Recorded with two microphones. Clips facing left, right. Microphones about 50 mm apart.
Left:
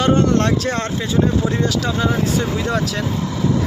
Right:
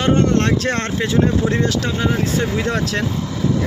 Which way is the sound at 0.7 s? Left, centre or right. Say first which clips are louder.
Right 2 dB; right.